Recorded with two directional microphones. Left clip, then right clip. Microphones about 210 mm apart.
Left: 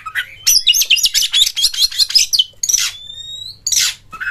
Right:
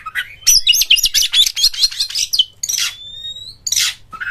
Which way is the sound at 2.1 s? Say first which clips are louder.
Left 3 dB; 30° left (ahead or behind).